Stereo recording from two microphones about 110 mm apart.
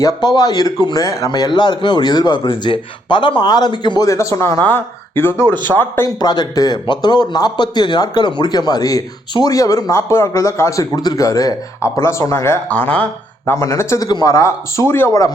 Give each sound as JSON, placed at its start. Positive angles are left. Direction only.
{"t": 0.0, "sound": "speech", "side_deg": 35}
{"t": 2.4, "sound": "a man's voice", "side_deg": 50}
{"t": 4.0, "sound": "speech", "side_deg": 30}
{"t": 5.5, "sound": "speech", "side_deg": -40}
{"t": 6.2, "sound": "speech", "side_deg": 35}
{"t": 13.5, "sound": "speech", "side_deg": 25}